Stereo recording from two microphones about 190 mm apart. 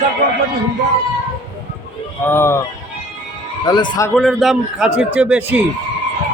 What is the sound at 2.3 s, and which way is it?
Speech, 15° left (ahead or behind).